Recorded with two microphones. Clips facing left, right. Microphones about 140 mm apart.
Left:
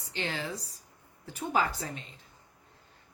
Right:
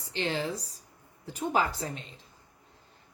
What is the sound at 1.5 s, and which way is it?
Speech, 40° right (ahead or behind).